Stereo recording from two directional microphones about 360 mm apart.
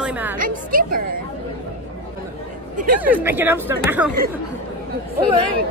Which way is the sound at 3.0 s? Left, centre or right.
Centre.